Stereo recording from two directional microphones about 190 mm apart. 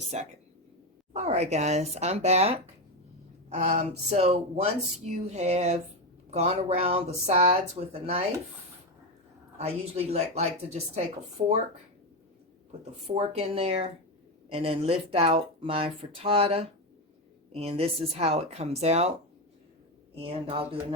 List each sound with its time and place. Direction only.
0.1 s speech: 35° right (ahead or behind)
9.6 s speech: 35° right (ahead or behind)
12.8 s speech: 30° right (ahead or behind)
20.1 s speech: 30° right (ahead or behind)